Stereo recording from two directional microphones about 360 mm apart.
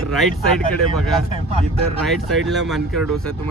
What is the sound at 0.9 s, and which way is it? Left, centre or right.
Speech, centre.